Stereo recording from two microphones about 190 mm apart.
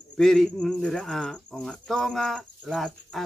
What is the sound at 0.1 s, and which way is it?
Speech, 5° left (ahead or behind).